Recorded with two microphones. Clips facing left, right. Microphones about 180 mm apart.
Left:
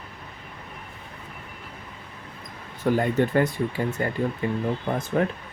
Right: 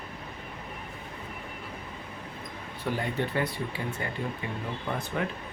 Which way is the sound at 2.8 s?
45° left (ahead or behind).